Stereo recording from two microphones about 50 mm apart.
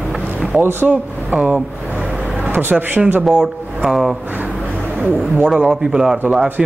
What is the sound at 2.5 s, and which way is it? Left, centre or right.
Speech, right.